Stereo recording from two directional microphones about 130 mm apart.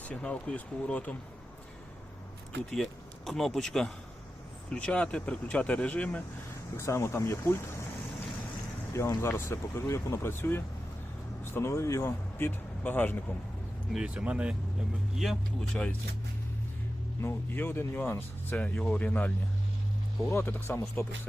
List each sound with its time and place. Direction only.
0.0 s speech: 10° left (ahead or behind)
2.6 s speech: centre (ahead or behind); by 7.9 s 20° left (ahead or behind)
8.9 s speech: 20° left (ahead or behind)
13.9 s speech: 5° right (ahead or behind)
15.2 s speech: centre (ahead or behind)
17.2 s speech: 15° left (ahead or behind)
20.3 s speech: 15° left (ahead or behind)